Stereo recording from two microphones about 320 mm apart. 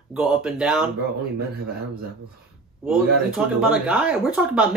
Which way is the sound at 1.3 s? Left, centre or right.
Right.